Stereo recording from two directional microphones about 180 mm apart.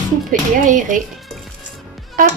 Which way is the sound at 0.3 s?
45° right (ahead or behind).